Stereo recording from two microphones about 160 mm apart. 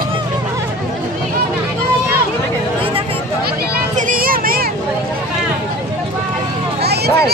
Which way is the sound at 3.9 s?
55° right (ahead or behind).